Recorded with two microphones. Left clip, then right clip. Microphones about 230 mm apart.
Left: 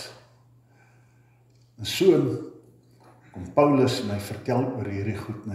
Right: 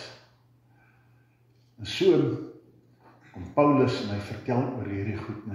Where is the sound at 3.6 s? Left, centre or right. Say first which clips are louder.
Left 2 dB; left.